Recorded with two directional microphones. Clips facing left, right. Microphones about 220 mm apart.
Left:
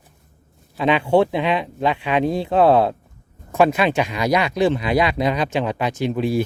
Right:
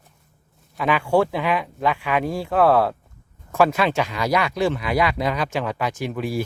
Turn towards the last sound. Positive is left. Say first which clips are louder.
# left 5 dB
turn(degrees=25)  # may be behind; listen again after turning